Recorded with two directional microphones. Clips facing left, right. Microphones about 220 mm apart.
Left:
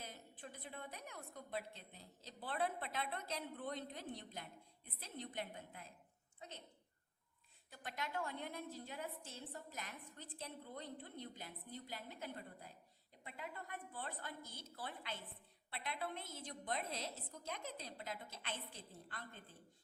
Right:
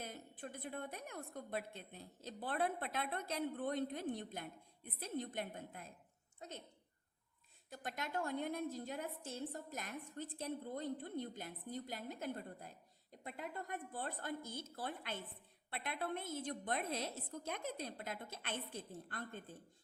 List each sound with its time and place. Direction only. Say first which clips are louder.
0.0 s a woman's voice: right 5 dB; 50° right (ahead or behind)
7.7 s a woman's voice: right 3 dB; 45° right (ahead or behind)